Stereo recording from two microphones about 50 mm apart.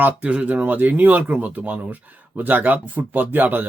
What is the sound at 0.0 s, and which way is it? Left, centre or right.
Speech, right.